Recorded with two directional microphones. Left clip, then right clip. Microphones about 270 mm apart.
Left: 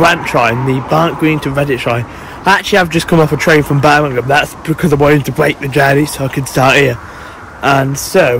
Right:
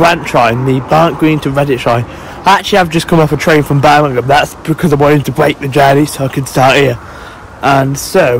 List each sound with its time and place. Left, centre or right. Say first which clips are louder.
0.0 s a man's voice: right 1 dB; centre